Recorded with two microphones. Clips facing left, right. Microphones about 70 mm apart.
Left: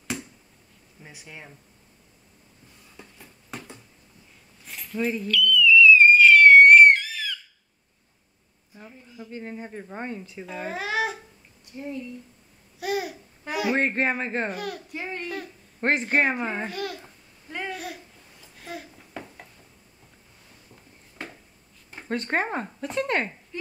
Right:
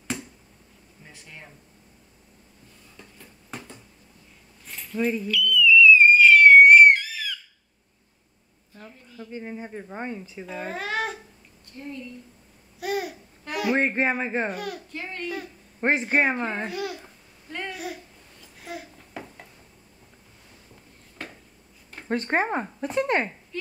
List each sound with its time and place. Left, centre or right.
1.0 s speech: centre
3.0 s a sound: centre
3.4 s finger snapping: centre
4.6 s whistle: centre
8.7 s a woman's voice: centre
9.3 s a child's voice: centre
11.7 s a woman's voice: centre
12.8 s a child's voice: centre
14.9 s a woman's voice: centre
15.2 s a sound: centre
16.0 s a child's voice: centre
17.5 s babbling: centre
22.1 s speech: right
23.5 s a sound: centre